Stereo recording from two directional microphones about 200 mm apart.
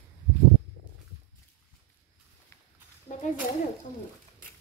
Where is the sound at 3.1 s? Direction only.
35° left (ahead or behind).